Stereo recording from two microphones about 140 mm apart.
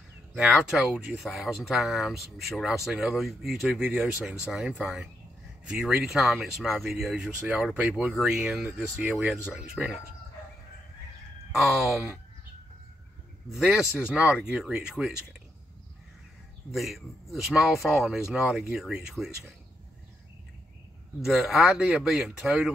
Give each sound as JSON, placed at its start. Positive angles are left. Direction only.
{"t": 0.4, "sound": "speech", "side_deg": -5}
{"t": 11.5, "sound": "speech", "side_deg": 0}
{"t": 13.5, "sound": "speech", "side_deg": -5}
{"t": 16.7, "sound": "speech", "side_deg": 0}
{"t": 21.4, "sound": "speech", "side_deg": 0}